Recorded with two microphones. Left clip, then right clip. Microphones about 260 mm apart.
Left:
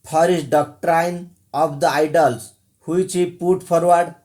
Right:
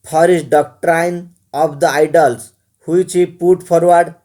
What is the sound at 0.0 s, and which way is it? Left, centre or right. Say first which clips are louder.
Speech: right 5 dB; right.